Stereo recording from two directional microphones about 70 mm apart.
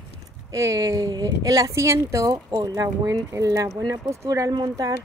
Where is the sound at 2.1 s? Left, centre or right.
Right.